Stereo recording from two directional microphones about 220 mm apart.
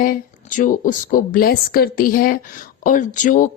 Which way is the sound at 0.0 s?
35° left (ahead or behind).